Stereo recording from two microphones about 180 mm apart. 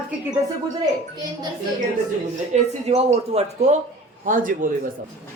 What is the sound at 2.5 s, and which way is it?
A man's voice, 35° right (ahead or behind).